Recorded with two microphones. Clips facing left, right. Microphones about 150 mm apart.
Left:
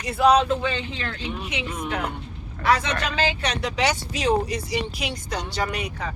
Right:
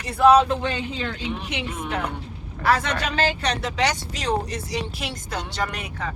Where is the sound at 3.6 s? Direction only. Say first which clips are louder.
Left 3 dB; 10° left (ahead or behind).